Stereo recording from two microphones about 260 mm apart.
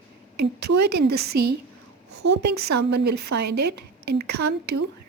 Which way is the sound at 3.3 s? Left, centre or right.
Right.